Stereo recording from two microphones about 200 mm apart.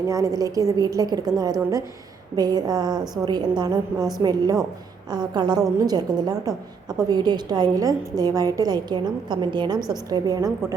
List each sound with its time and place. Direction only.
0.1 s a woman's voice: 15° right (ahead or behind)